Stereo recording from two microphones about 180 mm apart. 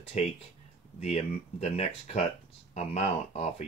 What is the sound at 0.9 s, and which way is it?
Speech, 35° left (ahead or behind).